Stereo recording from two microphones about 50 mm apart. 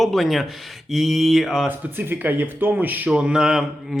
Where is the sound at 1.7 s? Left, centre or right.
Right.